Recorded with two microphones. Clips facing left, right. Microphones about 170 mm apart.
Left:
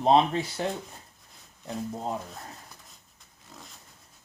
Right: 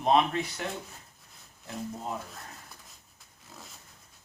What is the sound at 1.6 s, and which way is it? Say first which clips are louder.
Speech: left 4 dB; 35° left (ahead or behind).